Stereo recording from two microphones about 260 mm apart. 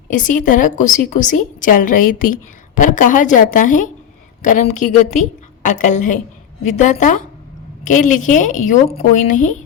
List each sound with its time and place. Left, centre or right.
0.1 s a woman's voice: left